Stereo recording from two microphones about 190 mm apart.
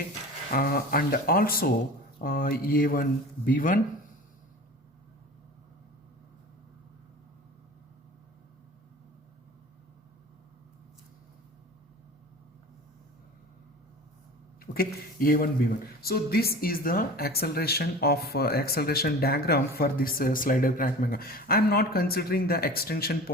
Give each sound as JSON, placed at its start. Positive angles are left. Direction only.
{"t": 0.5, "sound": "speech", "side_deg": 50}
{"t": 14.6, "sound": "speech", "side_deg": 50}